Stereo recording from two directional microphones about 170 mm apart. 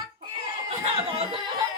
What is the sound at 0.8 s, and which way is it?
Snicker, 35° right (ahead or behind).